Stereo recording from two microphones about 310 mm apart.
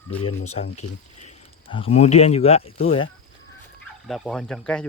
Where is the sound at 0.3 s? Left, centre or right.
Left.